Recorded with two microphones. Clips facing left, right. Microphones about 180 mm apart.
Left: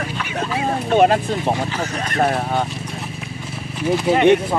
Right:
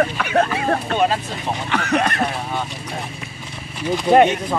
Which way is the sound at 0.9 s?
55° left (ahead or behind).